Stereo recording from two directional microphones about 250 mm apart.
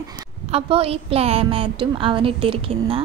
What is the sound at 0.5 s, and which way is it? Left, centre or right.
A woman's voice, right.